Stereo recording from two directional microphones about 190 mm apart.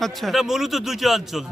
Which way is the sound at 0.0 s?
Centre (ahead or behind).